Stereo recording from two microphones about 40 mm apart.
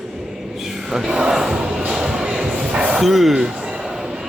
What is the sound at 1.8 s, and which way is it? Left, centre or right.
Music, right.